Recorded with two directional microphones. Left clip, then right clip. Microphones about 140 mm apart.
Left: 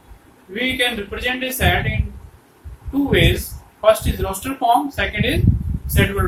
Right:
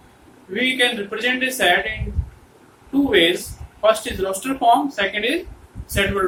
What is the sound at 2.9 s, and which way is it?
Speech, 15° right (ahead or behind).